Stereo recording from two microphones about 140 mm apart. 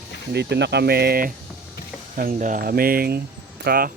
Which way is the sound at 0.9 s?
90° right.